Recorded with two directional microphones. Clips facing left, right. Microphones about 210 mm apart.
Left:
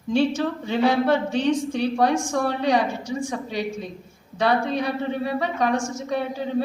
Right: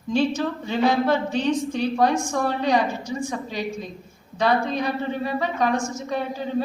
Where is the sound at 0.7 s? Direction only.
60° left (ahead or behind).